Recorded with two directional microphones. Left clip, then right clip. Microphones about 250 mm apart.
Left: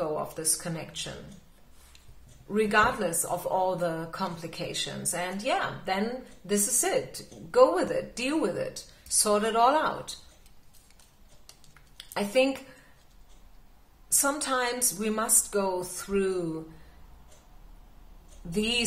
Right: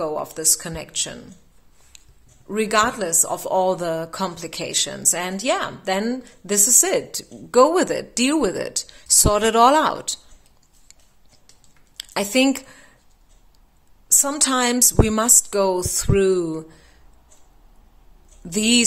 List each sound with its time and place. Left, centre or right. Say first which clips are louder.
0.0 s speech: right 7 dB; right
2.5 s speech: right 4 dB; right
12.0 s a sound: right 5 dB; right
14.0 s speech: right 7 dB; right
18.5 s speech: right 9 dB; right